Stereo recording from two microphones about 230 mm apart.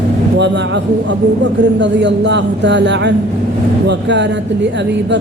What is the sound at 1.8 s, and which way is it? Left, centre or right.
Speech, right.